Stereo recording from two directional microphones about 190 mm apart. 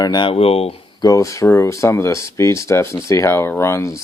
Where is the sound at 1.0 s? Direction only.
15° left (ahead or behind).